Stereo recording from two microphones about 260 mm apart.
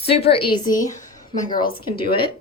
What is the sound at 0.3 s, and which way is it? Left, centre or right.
A woman's voice, centre.